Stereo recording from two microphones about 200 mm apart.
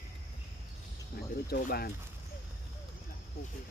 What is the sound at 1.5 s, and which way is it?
Speech, 50° left (ahead or behind).